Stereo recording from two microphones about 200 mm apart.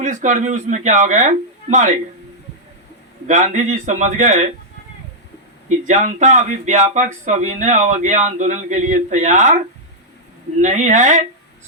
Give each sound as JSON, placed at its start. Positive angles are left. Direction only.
{"t": 0.0, "sound": "speech", "side_deg": -40}
{"t": 3.2, "sound": "speech", "side_deg": -40}
{"t": 5.6, "sound": "speech", "side_deg": -40}
{"t": 10.6, "sound": "speech", "side_deg": -35}